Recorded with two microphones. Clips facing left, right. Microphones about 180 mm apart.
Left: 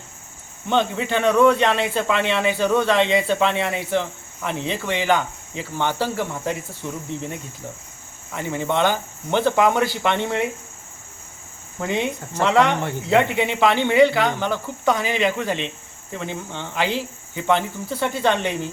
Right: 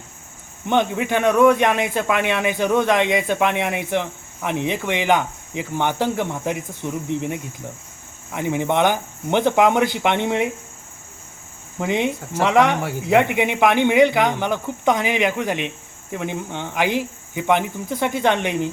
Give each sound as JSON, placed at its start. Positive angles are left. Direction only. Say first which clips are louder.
{"t": 0.7, "sound": "speech", "louder": "right 2 dB", "side_deg": -15}
{"t": 11.8, "sound": "speech", "louder": "right 2 dB", "side_deg": -15}